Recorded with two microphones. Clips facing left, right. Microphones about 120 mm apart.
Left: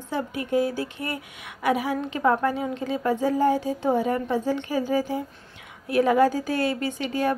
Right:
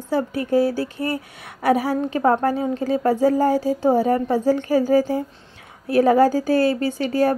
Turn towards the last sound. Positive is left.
turn(degrees=-40)  # may be behind; listen again after turning